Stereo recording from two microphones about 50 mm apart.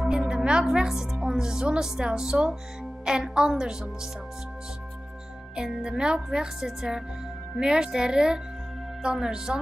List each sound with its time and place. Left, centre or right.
0.1 s a woman's voice: centre
5.6 s a woman's voice: centre
5.9 s a woman's voice: centre